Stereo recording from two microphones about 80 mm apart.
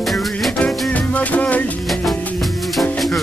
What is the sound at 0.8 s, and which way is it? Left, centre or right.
Music, centre.